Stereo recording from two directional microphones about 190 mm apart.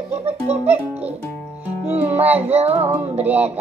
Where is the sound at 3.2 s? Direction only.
10° right (ahead or behind).